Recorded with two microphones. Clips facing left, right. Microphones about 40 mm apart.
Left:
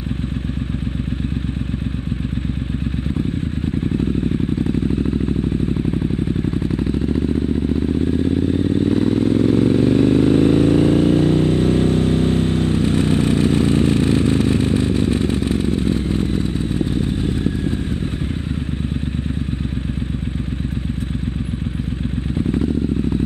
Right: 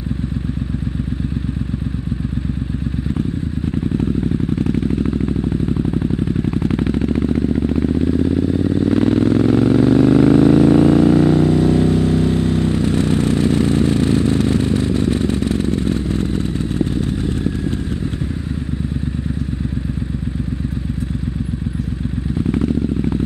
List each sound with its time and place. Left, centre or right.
6.6 s vehicle: right
8.5 s vehicle: left
8.8 s vehicle: right
10.5 s vehicle: right
11.0 s vehicle: right
11.4 s vehicle: left
16.2 s motorcycle: right
22.5 s vehicle: right